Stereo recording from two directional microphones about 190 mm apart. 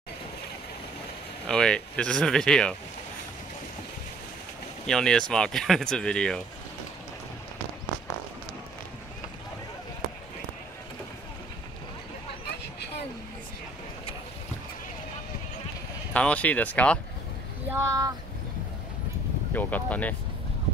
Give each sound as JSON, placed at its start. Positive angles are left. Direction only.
{"t": 1.5, "sound": "speech", "side_deg": 5}
{"t": 4.8, "sound": "speech", "side_deg": 5}
{"t": 16.1, "sound": "speech", "side_deg": 5}
{"t": 17.6, "sound": "speech", "side_deg": -15}
{"t": 19.5, "sound": "speech", "side_deg": 10}